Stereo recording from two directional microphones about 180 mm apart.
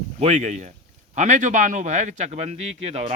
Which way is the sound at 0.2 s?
40° right (ahead or behind).